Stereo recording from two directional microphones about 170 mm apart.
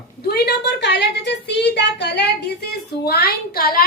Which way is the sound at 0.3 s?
75° left (ahead or behind).